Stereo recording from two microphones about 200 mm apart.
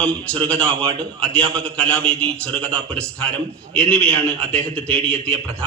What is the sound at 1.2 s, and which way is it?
A man's voice, 5° left (ahead or behind).